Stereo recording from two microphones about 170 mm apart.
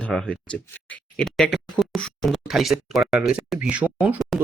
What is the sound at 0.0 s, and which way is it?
Speech, 5° left (ahead or behind).